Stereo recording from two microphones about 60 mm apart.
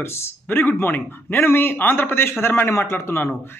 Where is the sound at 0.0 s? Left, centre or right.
Left.